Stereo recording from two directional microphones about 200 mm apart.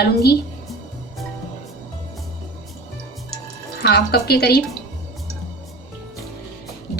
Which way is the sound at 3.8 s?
55° left (ahead or behind).